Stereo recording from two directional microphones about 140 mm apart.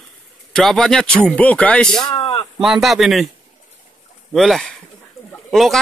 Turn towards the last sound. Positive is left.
turn(degrees=0)  # may be behind; listen again after turning